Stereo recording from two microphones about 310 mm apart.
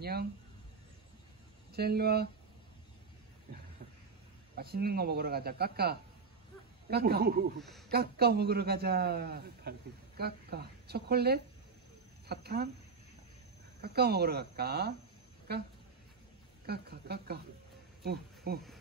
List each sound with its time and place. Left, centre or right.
0.0 s speech: right
1.7 s a man's voice: right
4.6 s a man's voice: right
13.7 s a man's voice: right